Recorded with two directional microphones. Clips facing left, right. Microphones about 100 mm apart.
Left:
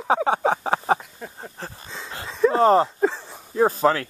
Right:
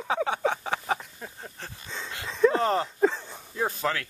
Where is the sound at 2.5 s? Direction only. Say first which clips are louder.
Left 8 dB; 35° left (ahead or behind).